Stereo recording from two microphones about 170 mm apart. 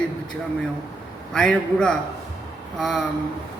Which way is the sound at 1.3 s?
5° left (ahead or behind).